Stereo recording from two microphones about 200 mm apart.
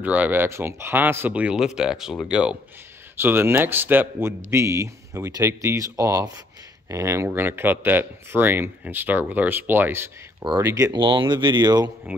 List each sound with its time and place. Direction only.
0.0 s a man's voice: 10° right (ahead or behind)
12.1 s a man's voice: 10° right (ahead or behind)